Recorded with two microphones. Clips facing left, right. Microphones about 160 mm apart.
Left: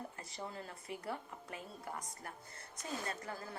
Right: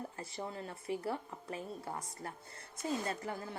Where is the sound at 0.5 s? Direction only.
25° right (ahead or behind).